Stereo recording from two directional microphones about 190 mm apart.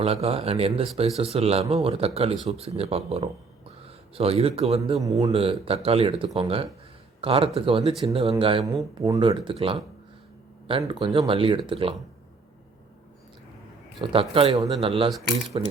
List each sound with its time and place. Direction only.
0.0 s a man's voice: 30° right (ahead or behind)
14.0 s speech: 30° right (ahead or behind)